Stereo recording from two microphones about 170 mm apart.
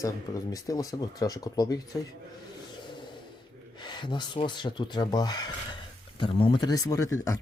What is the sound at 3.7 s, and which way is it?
Speech, 25° left (ahead or behind).